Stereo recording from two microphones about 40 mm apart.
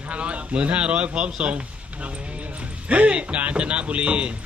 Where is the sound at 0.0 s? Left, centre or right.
Right.